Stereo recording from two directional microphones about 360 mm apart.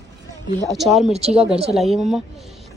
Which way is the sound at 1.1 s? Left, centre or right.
Centre.